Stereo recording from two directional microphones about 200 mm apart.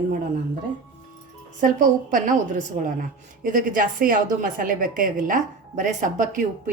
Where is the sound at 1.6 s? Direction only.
40° right (ahead or behind).